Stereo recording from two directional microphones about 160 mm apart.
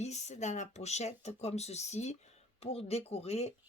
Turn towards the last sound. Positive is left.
turn(degrees=40)  # may be behind; listen again after turning